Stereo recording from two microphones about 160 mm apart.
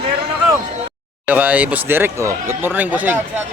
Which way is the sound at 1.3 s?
10° right (ahead or behind).